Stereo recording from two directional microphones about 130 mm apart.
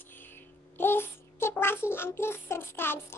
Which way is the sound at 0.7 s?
15° left (ahead or behind).